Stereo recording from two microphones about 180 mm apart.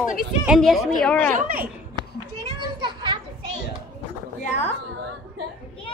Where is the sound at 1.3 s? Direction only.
50° right (ahead or behind).